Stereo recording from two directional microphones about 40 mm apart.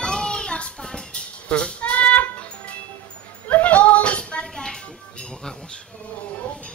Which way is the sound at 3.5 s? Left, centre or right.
Left.